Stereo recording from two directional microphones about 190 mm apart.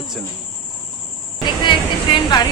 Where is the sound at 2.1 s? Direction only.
20° left (ahead or behind).